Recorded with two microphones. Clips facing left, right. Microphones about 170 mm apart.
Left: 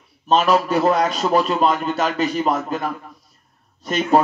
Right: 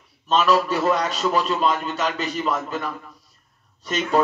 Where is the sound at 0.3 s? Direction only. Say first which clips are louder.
Left 3 dB; 55° left (ahead or behind).